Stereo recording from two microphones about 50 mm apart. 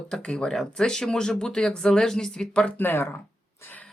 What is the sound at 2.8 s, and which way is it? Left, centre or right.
Speech, left.